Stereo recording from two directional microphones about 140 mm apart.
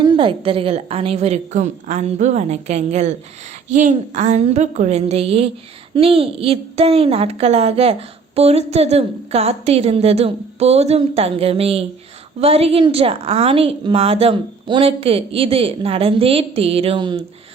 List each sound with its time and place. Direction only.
0.0 s a woman's voice: 35° right (ahead or behind)